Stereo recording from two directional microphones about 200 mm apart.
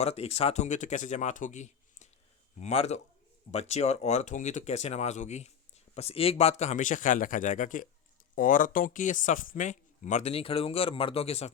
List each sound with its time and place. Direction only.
0.0 s speech: 30° left (ahead or behind)